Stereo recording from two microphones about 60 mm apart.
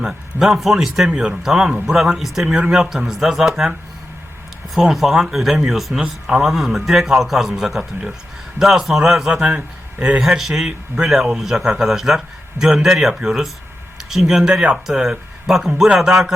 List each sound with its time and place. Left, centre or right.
0.0 s a man's voice: centre
9.3 s speech: centre
10.2 s a man's voice: centre